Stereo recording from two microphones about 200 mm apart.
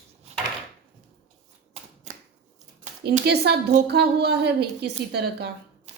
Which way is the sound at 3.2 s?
55° right (ahead or behind).